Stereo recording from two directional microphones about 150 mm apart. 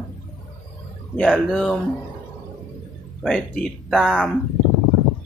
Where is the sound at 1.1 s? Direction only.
5° left (ahead or behind).